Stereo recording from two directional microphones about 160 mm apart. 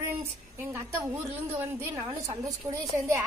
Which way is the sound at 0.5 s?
15° right (ahead or behind).